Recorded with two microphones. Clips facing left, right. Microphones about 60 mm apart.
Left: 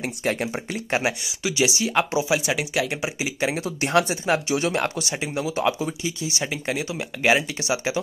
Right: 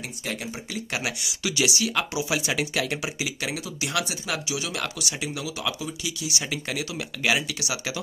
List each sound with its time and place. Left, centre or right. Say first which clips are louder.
0.2 s speech: left 8 dB; left
0.9 s speech: left 8 dB; left
2.3 s speech: left 1 dB; centre
3.8 s speech: left 8 dB; left